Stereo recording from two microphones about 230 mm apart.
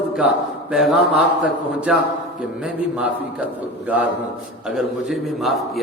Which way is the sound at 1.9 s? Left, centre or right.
Centre.